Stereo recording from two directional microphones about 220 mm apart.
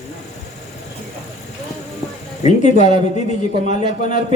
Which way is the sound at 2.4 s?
30° left (ahead or behind).